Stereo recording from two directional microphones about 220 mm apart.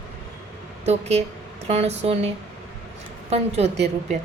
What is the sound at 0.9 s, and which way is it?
A woman's voice, 30° right (ahead or behind).